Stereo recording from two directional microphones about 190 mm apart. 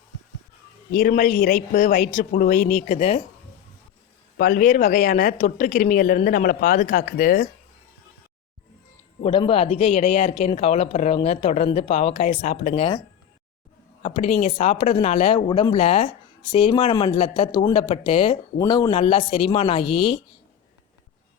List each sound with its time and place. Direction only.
0.9 s a woman's voice: 50° left (ahead or behind)
4.4 s a woman's voice: 50° left (ahead or behind)
9.2 s speech: 30° left (ahead or behind)
14.0 s speech: 35° left (ahead or behind)